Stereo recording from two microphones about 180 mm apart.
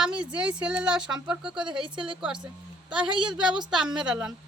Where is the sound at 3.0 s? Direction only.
25° right (ahead or behind).